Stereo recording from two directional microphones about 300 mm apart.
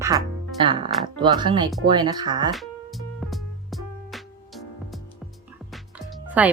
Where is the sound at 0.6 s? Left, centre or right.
Centre.